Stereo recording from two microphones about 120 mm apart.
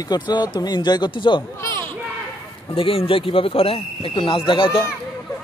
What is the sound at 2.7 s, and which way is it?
Speech, 50° left (ahead or behind).